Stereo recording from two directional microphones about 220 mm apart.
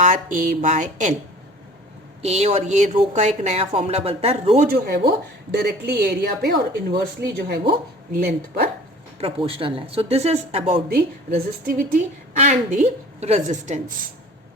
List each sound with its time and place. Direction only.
0.0 s a woman's voice: 35° right (ahead or behind)
2.2 s a woman's voice: 30° right (ahead or behind)
9.1 s speech: 25° right (ahead or behind)
10.8 s a woman's voice: 45° right (ahead or behind)